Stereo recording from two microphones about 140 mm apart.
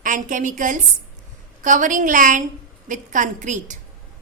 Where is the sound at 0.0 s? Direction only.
65° right (ahead or behind).